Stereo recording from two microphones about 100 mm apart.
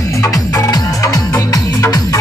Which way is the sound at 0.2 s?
35° left (ahead or behind).